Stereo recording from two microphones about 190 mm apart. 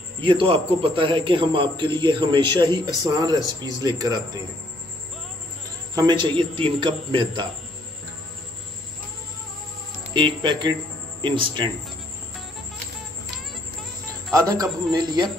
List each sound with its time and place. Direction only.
0.2 s a man's voice: 25° right (ahead or behind)
5.9 s a man's voice: 25° right (ahead or behind)
10.1 s a man's voice: 25° right (ahead or behind)
14.3 s a man's voice: 20° right (ahead or behind)